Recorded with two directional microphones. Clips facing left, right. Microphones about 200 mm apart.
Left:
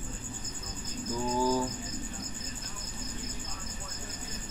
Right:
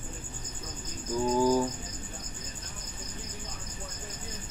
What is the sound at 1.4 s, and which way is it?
Cricket, 15° right (ahead or behind).